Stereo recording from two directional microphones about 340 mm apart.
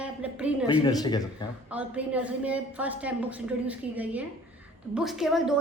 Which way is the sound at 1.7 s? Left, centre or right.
Centre.